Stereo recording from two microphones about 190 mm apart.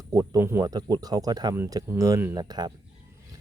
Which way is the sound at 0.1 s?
15° right (ahead or behind).